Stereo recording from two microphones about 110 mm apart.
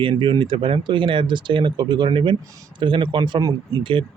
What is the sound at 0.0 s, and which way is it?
Speech, 45° right (ahead or behind).